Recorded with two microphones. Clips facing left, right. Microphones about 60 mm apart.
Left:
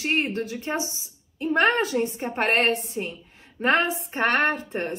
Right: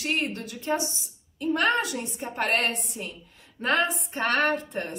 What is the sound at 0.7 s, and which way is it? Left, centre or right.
A woman's voice, left.